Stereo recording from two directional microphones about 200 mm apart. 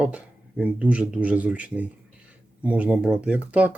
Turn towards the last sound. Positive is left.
turn(degrees=-5)  # may be behind; listen again after turning